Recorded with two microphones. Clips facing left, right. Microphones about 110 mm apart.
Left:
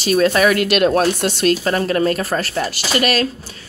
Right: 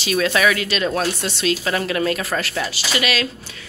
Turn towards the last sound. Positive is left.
turn(degrees=45)  # may be behind; listen again after turning